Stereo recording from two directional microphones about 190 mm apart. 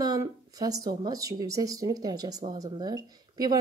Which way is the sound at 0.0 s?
20° right (ahead or behind).